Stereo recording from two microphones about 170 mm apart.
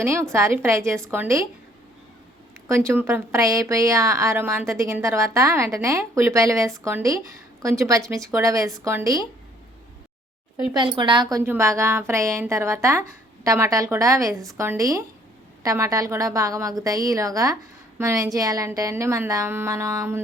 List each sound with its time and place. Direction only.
0.0 s a woman's voice: 15° right (ahead or behind)
2.6 s a woman's voice: 15° right (ahead or behind)
10.8 s a woman's voice: 30° right (ahead or behind)